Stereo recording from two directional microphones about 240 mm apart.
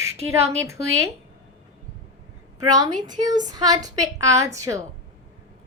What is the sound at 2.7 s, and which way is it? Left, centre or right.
A woman's voice, centre.